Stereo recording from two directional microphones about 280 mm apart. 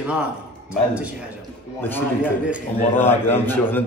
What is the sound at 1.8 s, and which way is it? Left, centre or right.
A man's voice, centre.